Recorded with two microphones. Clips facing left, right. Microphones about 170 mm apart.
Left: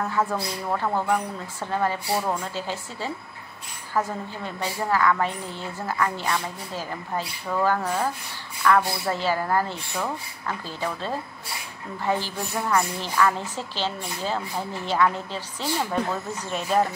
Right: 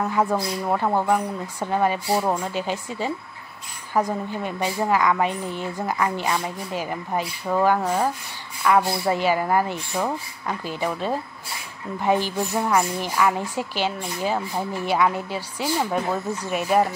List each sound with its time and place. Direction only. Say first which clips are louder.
0.0 s speech: right 3 dB; 15° right (ahead or behind)